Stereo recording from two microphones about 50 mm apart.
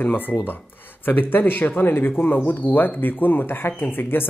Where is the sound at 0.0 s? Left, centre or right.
Left.